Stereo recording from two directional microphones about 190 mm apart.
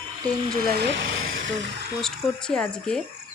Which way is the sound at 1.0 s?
90° right.